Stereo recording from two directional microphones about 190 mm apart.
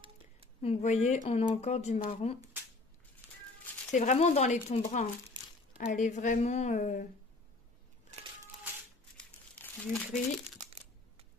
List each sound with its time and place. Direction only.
0.6 s speech: 35° left (ahead or behind)
2.6 s shuffling cards: 10° right (ahead or behind)
3.9 s speech: 40° left (ahead or behind)
9.1 s crumpling: 5° left (ahead or behind)